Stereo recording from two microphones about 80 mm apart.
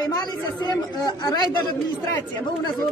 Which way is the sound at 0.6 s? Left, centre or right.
Left.